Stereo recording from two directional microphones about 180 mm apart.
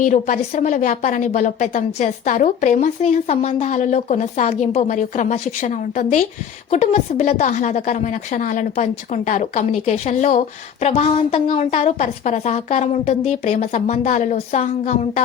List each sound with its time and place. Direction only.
0.0 s a woman's voice: 45° left (ahead or behind)